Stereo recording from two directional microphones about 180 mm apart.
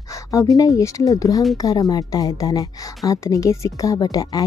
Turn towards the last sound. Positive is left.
turn(degrees=20)  # may be behind; listen again after turning